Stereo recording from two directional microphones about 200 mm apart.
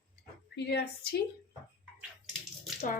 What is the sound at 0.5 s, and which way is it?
Speech, 55° left (ahead or behind).